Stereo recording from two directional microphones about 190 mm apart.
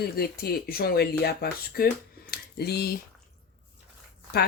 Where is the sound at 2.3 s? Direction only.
55° left (ahead or behind).